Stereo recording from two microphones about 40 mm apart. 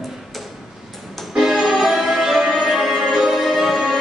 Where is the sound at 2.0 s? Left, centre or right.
Centre.